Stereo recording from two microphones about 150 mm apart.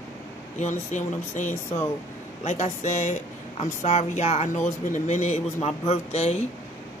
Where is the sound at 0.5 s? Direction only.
55° left (ahead or behind).